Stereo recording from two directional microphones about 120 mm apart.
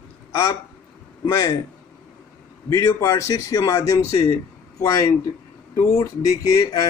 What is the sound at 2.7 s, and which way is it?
Speech, 30° left (ahead or behind).